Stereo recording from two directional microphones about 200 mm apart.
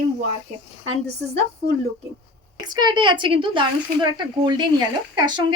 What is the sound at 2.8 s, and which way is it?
A woman's voice, 20° right (ahead or behind).